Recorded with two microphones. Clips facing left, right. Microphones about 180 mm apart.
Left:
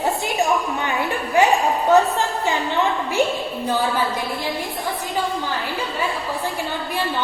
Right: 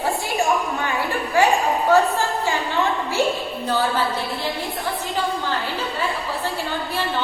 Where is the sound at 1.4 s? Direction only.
20° left (ahead or behind).